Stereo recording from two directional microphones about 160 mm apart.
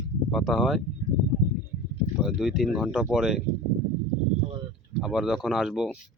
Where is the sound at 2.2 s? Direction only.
5° right (ahead or behind).